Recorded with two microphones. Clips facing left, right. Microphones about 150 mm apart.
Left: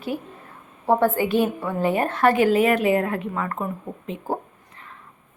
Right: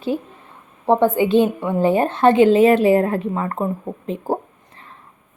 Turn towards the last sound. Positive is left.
turn(degrees=-30)  # may be behind; listen again after turning